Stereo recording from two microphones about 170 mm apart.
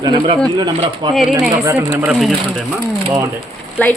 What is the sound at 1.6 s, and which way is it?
Speech, 15° right (ahead or behind).